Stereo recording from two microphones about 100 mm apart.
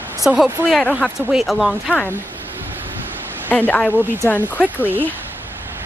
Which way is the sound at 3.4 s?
15° left (ahead or behind).